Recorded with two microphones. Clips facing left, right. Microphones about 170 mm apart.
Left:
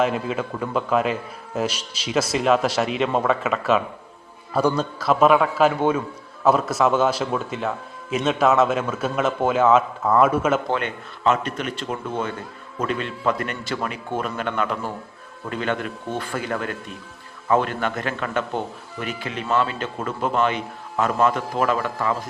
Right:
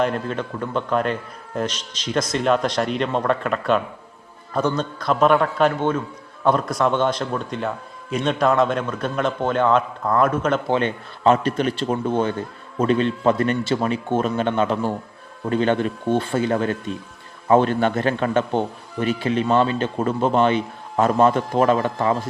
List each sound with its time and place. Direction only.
0.0 s a man's voice: 5° left (ahead or behind)
10.8 s a man's voice: 30° right (ahead or behind)